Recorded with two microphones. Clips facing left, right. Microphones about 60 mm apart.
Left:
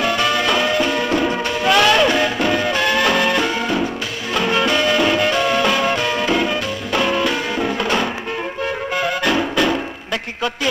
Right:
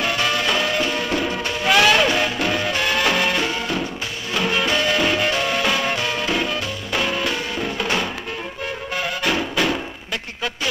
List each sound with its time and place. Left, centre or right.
0.0 s music: centre
0.7 s music: centre
1.7 s music: centre
4.6 s music: centre
7.5 s music: left